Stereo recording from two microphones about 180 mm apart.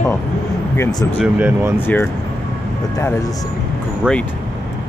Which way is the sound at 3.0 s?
15° left (ahead or behind).